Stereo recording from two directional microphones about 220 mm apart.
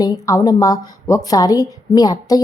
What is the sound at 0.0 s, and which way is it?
A woman's voice, 15° left (ahead or behind).